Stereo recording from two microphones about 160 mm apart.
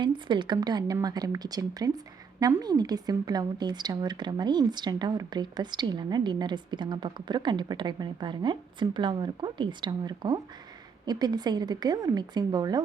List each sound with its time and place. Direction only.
0.0 s a woman's voice: 30° right (ahead or behind)